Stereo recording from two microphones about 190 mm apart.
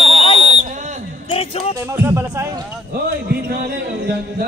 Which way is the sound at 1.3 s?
30° left (ahead or behind).